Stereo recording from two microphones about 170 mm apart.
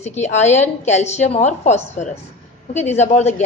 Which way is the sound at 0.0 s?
40° left (ahead or behind).